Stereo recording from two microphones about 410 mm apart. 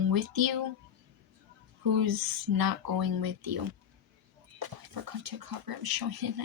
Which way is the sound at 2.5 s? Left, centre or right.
Right.